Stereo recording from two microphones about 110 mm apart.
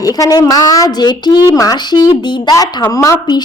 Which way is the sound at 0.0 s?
35° left (ahead or behind).